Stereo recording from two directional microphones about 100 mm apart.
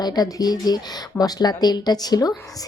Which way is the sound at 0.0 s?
40° left (ahead or behind).